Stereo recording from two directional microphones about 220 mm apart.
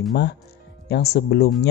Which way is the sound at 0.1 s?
50° left (ahead or behind).